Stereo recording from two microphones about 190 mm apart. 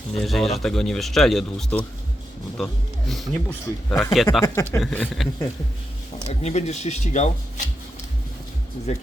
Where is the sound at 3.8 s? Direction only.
5° left (ahead or behind).